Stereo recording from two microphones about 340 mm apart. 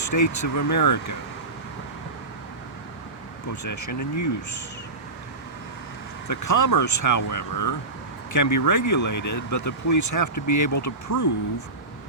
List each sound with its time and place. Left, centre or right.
0.0 s speech: left
3.5 s speech: left
6.2 s speech: left